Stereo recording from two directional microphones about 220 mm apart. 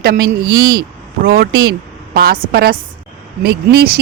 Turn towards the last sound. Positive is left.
turn(degrees=-45)  # may be behind; listen again after turning